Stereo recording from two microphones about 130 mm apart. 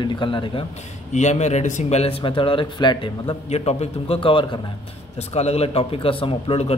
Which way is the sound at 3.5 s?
55° left (ahead or behind).